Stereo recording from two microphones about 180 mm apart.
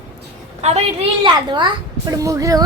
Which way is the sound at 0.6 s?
35° right (ahead or behind).